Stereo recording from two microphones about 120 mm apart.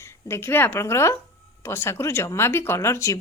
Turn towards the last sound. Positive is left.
turn(degrees=25)  # may be behind; listen again after turning